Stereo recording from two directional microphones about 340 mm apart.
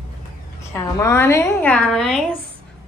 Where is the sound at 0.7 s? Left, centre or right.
Centre.